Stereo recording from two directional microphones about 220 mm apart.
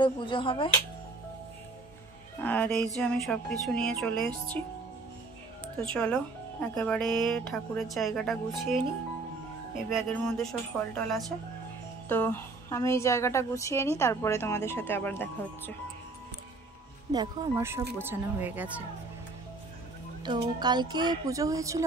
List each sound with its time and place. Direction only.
0.0 s speech: 20° left (ahead or behind)
2.4 s speech: 5° left (ahead or behind)
5.8 s speech: 5° left (ahead or behind)
9.8 s a woman's voice: centre (ahead or behind)
17.1 s speech: 20° right (ahead or behind)
20.2 s a woman's voice: 20° right (ahead or behind)